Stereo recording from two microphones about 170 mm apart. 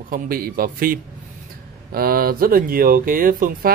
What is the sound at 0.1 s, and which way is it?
Speech, 55° right (ahead or behind).